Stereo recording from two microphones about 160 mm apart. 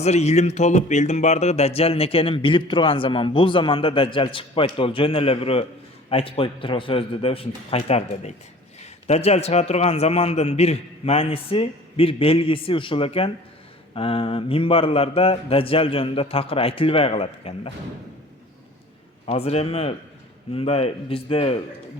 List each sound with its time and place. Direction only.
0.0 s speech: 45° left (ahead or behind)
19.2 s speech: 40° left (ahead or behind)